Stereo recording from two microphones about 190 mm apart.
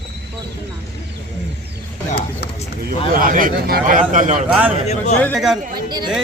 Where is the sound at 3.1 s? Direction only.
45° right (ahead or behind).